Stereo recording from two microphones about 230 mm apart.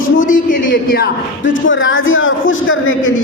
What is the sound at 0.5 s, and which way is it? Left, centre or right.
Speech, left.